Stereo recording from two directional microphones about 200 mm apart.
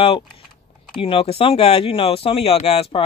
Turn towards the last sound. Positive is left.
turn(degrees=30)  # may be behind; listen again after turning